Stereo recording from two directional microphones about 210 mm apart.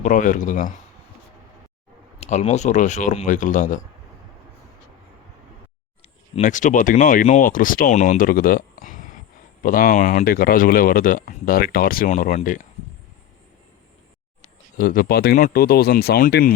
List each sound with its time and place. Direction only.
0.0 s speech: 35° left (ahead or behind)
2.1 s speech: 30° left (ahead or behind)
6.3 s speech: 35° left (ahead or behind)
14.8 s speech: 40° left (ahead or behind)